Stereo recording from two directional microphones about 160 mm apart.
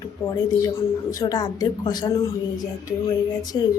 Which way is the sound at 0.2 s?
20° left (ahead or behind).